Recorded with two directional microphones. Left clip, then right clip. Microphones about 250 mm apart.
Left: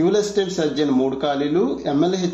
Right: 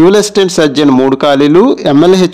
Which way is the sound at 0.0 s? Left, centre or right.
Right.